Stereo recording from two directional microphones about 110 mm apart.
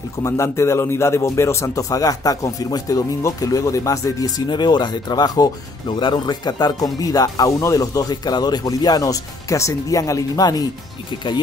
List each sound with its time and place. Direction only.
0.2 s a man's voice: 25° left (ahead or behind)
4.5 s speech: 40° left (ahead or behind)